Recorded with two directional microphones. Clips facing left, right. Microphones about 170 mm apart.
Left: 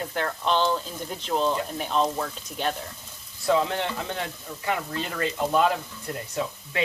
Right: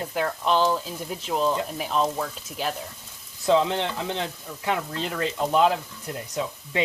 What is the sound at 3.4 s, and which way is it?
Speech, 20° right (ahead or behind).